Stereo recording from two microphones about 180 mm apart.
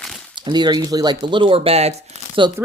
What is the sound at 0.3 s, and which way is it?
Speech, 25° right (ahead or behind).